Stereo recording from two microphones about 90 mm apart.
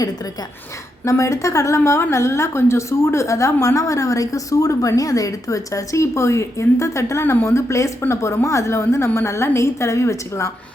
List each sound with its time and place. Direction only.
1.0 s a woman's voice: 35° left (ahead or behind)